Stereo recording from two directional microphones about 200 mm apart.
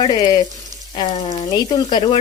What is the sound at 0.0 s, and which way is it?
Speech, 20° left (ahead or behind).